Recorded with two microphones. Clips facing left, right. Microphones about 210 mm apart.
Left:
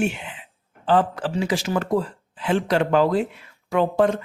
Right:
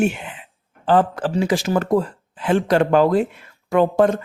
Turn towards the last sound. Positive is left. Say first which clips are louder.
# right 3 dB
turn(degrees=-45)  # may be behind; listen again after turning